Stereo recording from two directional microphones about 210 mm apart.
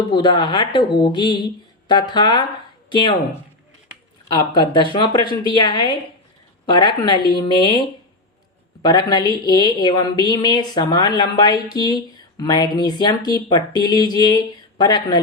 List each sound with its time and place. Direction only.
0.0 s a woman's voice: 20° left (ahead or behind)
4.5 s a woman's voice: 20° left (ahead or behind)